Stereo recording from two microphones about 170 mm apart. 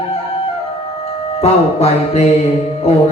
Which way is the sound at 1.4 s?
35° left (ahead or behind).